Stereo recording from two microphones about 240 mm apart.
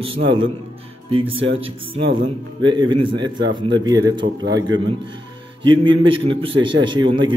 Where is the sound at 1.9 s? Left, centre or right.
Right.